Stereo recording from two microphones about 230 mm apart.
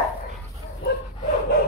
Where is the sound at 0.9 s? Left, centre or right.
Left.